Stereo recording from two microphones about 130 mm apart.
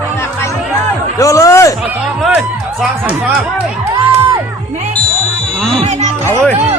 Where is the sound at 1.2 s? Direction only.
25° left (ahead or behind).